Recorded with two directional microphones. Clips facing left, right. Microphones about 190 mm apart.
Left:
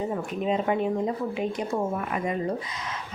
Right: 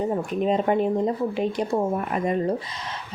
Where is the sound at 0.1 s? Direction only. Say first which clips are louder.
Right 4 dB; 40° right (ahead or behind).